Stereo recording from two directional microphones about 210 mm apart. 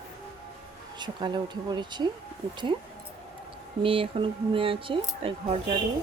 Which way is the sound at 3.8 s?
25° right (ahead or behind).